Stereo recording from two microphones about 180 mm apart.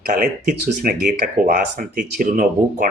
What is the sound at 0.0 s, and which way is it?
Speech, 50° right (ahead or behind).